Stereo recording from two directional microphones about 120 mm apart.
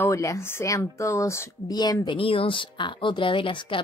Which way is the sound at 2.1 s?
50° left (ahead or behind).